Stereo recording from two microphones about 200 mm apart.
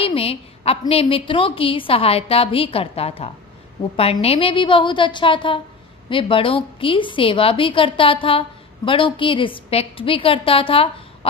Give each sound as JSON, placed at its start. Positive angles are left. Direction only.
{"t": 0.0, "sound": "a woman's voice", "side_deg": 30}